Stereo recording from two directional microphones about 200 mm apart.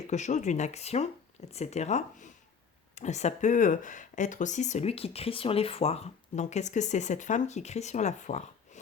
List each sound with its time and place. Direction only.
0.1 s speech: 35° left (ahead or behind)